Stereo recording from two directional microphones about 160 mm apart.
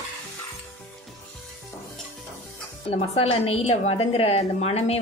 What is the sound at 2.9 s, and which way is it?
A woman's voice, 40° left (ahead or behind).